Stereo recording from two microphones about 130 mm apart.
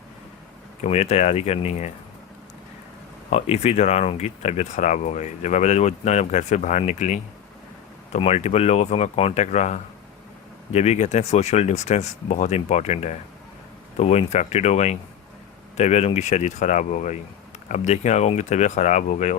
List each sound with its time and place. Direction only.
0.8 s speech: 55° left (ahead or behind)
3.2 s speech: 50° left (ahead or behind)